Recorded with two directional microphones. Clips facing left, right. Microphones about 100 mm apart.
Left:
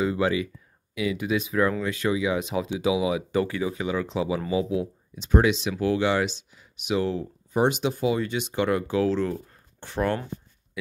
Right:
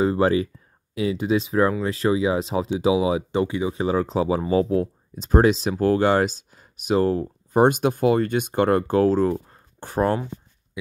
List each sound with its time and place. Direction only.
0.0 s speech: 40° right (ahead or behind); by 3.7 s 20° right (ahead or behind)
3.7 s speech: 35° right (ahead or behind)